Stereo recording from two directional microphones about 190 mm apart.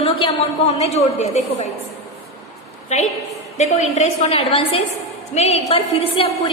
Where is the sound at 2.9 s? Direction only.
35° left (ahead or behind).